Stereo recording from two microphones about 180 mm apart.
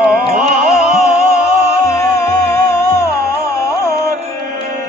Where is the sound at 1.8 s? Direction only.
15° left (ahead or behind).